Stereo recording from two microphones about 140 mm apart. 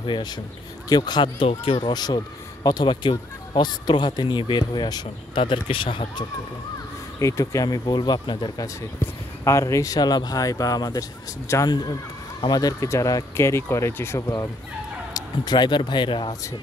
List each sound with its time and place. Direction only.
0.0 s speech: 30° left (ahead or behind)
7.2 s speech: 25° left (ahead or behind)
9.0 s speech: 20° left (ahead or behind)